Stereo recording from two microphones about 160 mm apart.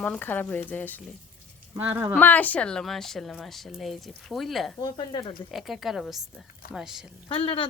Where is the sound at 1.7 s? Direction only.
10° right (ahead or behind).